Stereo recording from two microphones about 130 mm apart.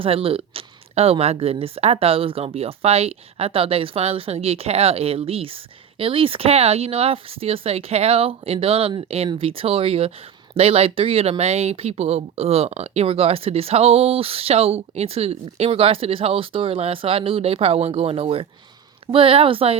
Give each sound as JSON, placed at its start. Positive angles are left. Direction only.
{"t": 0.0, "sound": "speech", "side_deg": -45}